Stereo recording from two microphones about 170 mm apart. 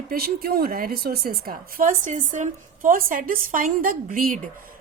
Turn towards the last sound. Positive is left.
turn(degrees=-55)  # may be behind; listen again after turning